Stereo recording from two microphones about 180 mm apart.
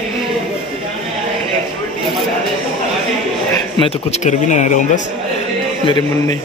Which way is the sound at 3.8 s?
35° left (ahead or behind).